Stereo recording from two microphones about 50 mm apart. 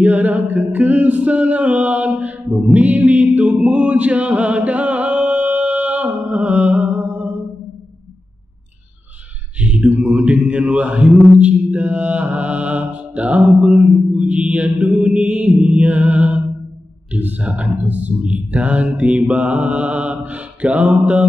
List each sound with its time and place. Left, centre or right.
0.0 s music: right
9.6 s a sound: right
9.8 s mantra: right
17.1 s speech: right
17.4 s mantra: right